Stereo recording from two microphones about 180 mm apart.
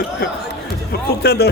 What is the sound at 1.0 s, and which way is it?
Speech, 60° left (ahead or behind).